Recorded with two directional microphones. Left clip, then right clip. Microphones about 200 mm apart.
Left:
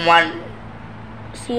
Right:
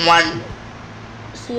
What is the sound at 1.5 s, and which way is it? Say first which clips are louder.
Speech: left 2 dB; 40° left (ahead or behind).